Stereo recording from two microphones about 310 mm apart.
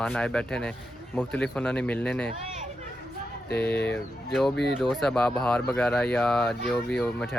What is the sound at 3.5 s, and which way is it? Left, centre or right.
Speech, left.